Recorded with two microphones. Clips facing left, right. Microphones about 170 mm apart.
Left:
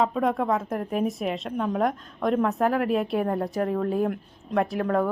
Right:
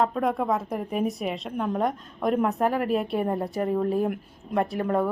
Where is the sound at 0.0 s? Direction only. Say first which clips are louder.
Left 1 dB; centre (ahead or behind).